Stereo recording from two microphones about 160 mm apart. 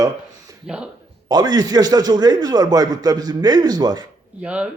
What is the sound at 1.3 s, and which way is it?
A man's voice, 25° right (ahead or behind).